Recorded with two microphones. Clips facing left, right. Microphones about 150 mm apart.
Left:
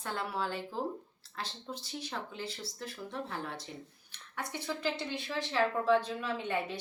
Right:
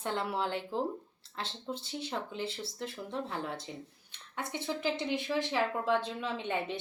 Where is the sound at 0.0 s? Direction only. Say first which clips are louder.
Right 3 dB; 20° right (ahead or behind).